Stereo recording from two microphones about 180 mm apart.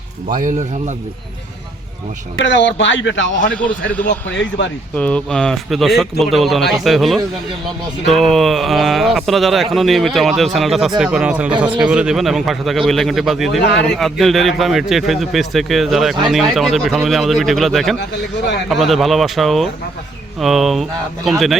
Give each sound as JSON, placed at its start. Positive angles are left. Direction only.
{"t": 0.3, "sound": "speech", "side_deg": -45}
{"t": 2.4, "sound": "speech", "side_deg": 90}
{"t": 3.5, "sound": "speech", "side_deg": 5}
{"t": 4.0, "sound": "speech", "side_deg": 85}
{"t": 4.9, "sound": "a man's voice", "side_deg": 5}